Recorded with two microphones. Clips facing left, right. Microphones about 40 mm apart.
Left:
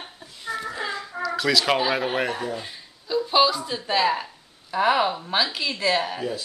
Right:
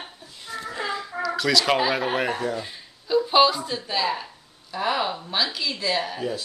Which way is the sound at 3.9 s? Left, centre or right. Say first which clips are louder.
Left 5 dB; left.